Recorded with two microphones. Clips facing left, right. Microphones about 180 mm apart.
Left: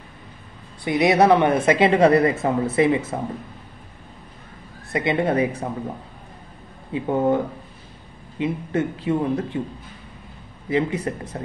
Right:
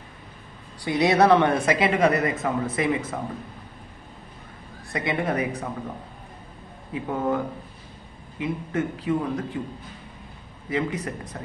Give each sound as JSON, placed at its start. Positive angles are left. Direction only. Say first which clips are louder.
{"t": 0.8, "sound": "speech", "louder": "left 2 dB", "side_deg": 20}
{"t": 4.9, "sound": "speech", "louder": "left 5 dB", "side_deg": 25}
{"t": 6.9, "sound": "speech", "louder": "left 6 dB", "side_deg": 30}
{"t": 10.7, "sound": "speech", "louder": "left 5 dB", "side_deg": 30}